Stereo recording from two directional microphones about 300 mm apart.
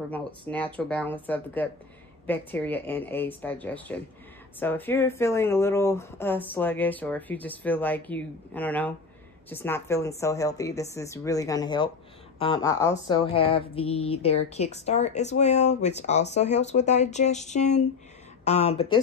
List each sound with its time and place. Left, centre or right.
0.1 s a woman's voice: centre